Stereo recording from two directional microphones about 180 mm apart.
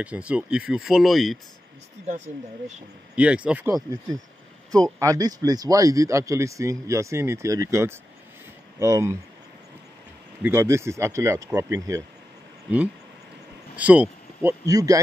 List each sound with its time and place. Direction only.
0.0 s speech: 5° right (ahead or behind)
2.0 s speech: 40° right (ahead or behind)
3.2 s speech: 5° right (ahead or behind)
3.7 s speech: 20° right (ahead or behind)
10.4 s speech: 15° right (ahead or behind)
13.7 s speech: 5° right (ahead or behind)
14.7 s speech: 20° right (ahead or behind)